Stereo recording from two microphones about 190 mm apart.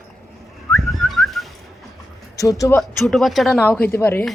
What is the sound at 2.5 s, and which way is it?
Speech, 15° left (ahead or behind).